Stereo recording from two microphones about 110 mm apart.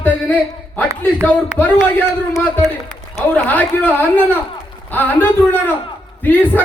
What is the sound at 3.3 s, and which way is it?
Speech, 15° left (ahead or behind).